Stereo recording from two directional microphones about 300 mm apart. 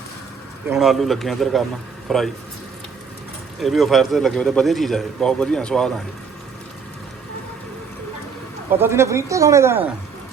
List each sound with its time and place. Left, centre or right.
0.7 s a man's voice: centre
3.6 s a man's voice: centre
8.7 s speech: centre